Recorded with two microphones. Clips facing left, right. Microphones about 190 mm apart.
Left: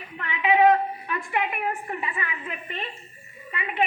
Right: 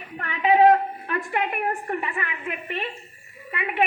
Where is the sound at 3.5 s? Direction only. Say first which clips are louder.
Right 3 dB; 60° right (ahead or behind).